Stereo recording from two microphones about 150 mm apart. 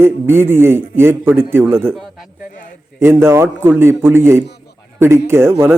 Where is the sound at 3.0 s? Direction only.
15° right (ahead or behind).